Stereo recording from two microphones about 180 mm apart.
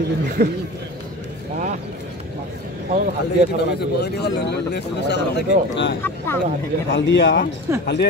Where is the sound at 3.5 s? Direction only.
65° left (ahead or behind).